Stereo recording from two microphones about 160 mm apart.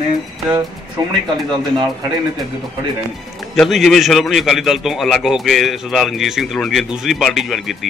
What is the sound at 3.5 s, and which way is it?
A man's voice, centre (ahead or behind).